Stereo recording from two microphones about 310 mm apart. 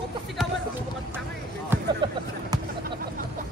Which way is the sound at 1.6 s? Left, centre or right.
Centre.